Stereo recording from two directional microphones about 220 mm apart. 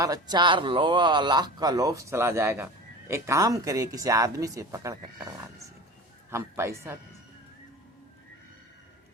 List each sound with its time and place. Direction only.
0.0 s a man's voice: 20° right (ahead or behind)
6.3 s speech: 10° right (ahead or behind)